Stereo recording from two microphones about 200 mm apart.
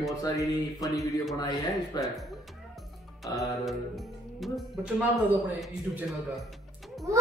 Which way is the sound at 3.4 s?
Centre (ahead or behind).